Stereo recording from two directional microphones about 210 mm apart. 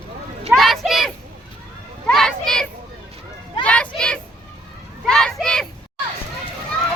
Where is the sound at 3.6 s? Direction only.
5° left (ahead or behind).